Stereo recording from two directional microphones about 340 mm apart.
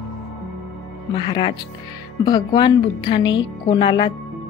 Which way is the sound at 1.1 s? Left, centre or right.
Centre.